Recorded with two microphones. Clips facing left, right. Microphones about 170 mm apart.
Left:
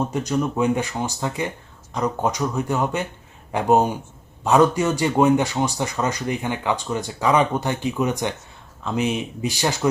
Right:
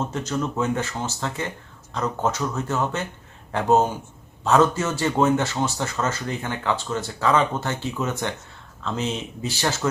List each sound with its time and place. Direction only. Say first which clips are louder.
0.0 s speech: left 4 dB; 15° left (ahead or behind)